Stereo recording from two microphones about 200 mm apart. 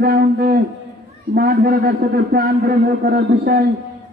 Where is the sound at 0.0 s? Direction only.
50° right (ahead or behind).